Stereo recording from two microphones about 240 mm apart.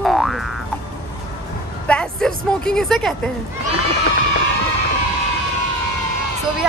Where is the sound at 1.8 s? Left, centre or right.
Centre.